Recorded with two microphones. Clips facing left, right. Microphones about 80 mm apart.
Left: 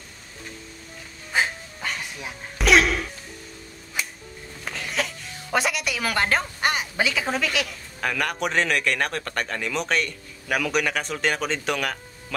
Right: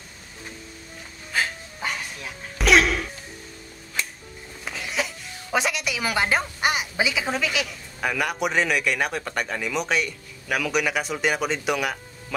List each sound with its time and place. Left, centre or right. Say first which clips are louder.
1.3 s dog: left 2 dB; left
2.6 s a sound: even; centre
4.0 s music: even; centre
4.6 s speech: even; centre